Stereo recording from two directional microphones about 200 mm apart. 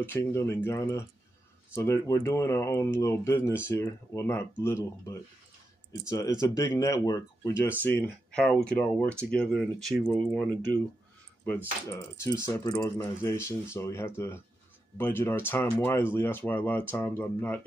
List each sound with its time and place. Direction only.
0.0 s speech: 10° left (ahead or behind)